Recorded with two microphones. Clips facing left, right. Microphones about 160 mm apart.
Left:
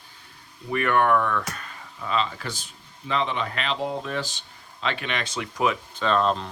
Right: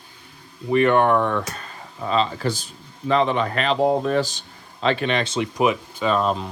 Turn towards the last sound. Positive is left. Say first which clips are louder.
# right 2 dB
turn(degrees=-10)  # may be behind; listen again after turning